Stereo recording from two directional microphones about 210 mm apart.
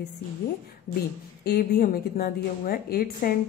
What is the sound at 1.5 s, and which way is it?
A woman's voice, 45° left (ahead or behind).